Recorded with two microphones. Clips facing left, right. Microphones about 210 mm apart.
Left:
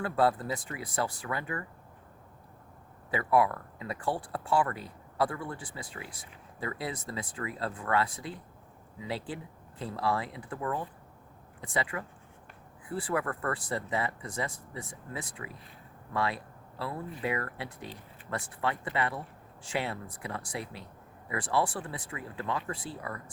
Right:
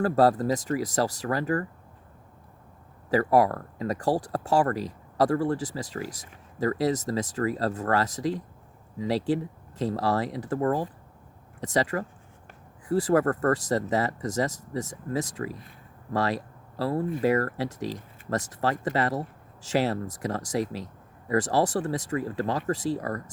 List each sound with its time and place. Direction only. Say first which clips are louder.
0.0 s speech: right 6 dB; 40° right (ahead or behind)
3.1 s speech: right 5 dB; 40° right (ahead or behind)
4.7 s speech: right 10 dB; 90° right
5.2 s speech: right 9 dB; 35° right (ahead or behind)